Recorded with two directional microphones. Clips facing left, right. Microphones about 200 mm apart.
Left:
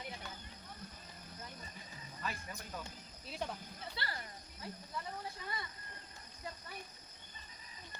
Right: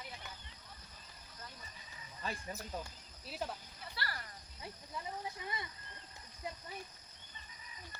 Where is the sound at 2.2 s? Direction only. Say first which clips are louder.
Right 2 dB; 30° right (ahead or behind).